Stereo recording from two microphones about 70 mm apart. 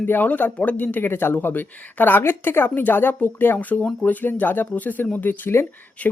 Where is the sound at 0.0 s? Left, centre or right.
Left.